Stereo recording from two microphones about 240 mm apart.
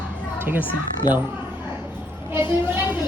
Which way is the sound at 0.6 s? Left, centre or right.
Centre.